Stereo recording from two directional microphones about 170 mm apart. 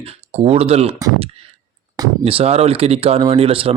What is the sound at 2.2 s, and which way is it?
Speech, 35° right (ahead or behind).